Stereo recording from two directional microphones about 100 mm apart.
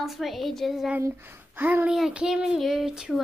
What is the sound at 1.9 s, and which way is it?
Speech, 10° right (ahead or behind).